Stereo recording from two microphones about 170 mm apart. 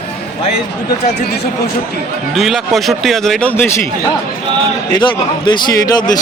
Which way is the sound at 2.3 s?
Centre (ahead or behind).